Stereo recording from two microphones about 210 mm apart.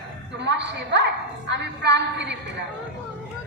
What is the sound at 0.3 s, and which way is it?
A woman's voice, 55° right (ahead or behind).